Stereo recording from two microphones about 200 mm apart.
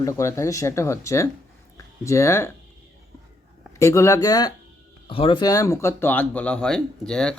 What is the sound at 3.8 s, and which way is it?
Speech, 15° left (ahead or behind).